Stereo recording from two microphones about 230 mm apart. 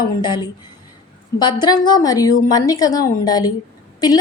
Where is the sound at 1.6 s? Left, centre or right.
Centre.